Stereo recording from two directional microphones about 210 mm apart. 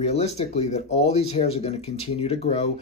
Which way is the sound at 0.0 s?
30° left (ahead or behind).